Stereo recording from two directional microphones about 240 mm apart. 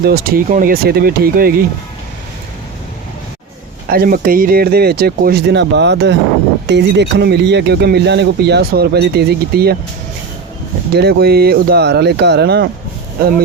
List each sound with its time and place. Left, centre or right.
0.0 s speech: right
3.8 s speech: right
10.9 s speech: right